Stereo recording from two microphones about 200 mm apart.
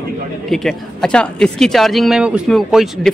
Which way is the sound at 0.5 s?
Centre (ahead or behind).